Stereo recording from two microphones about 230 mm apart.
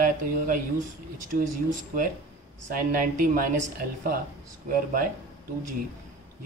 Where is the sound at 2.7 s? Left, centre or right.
Right.